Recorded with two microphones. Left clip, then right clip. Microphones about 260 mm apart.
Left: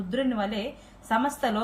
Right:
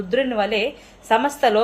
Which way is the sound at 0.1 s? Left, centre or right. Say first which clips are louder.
Right 9 dB; right.